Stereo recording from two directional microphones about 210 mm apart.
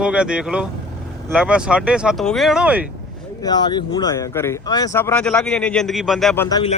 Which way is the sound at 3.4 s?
20° left (ahead or behind).